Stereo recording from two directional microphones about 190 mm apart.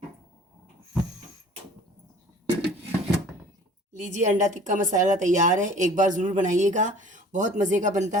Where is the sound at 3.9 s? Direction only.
40° right (ahead or behind).